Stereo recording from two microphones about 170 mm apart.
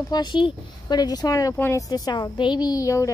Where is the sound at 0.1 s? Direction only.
25° left (ahead or behind).